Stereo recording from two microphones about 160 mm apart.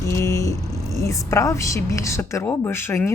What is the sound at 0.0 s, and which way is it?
A woman's voice, 20° left (ahead or behind).